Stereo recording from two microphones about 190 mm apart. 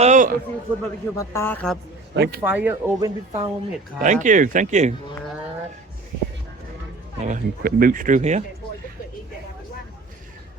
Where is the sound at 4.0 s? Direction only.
40° right (ahead or behind).